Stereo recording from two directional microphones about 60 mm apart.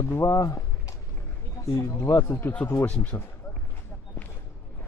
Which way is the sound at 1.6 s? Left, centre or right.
Left.